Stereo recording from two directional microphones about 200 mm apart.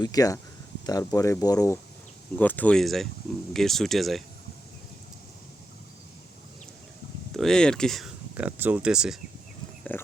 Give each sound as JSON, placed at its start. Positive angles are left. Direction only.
{"t": 0.0, "sound": "speech", "side_deg": 20}
{"t": 7.3, "sound": "speech", "side_deg": 5}
{"t": 9.9, "sound": "speech", "side_deg": 10}